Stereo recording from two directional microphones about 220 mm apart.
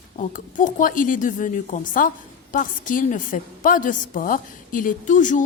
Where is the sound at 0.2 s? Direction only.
35° left (ahead or behind).